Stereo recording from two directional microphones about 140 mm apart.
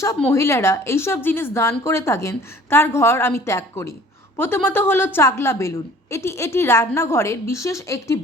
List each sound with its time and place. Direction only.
0.3 s a woman's voice: 20° left (ahead or behind)